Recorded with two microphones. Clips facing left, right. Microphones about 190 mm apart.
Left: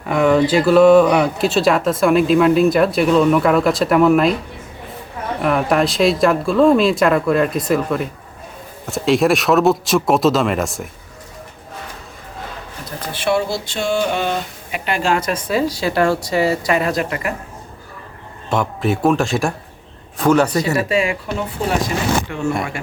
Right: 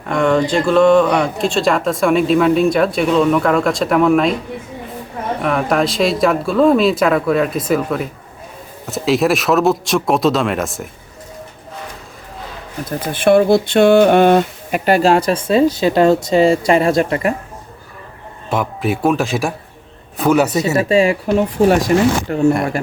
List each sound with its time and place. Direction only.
0.0 s speech: 5° left (ahead or behind)
5.4 s speech: centre (ahead or behind)
13.1 s speech: 55° right (ahead or behind)
14.8 s speech: 40° right (ahead or behind)
18.4 s speech: 5° right (ahead or behind)
20.7 s speech: 30° right (ahead or behind)
21.6 s speech: 45° right (ahead or behind)